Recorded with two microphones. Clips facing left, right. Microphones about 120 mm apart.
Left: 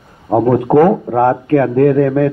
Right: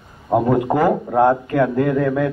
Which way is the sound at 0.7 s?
45° left (ahead or behind).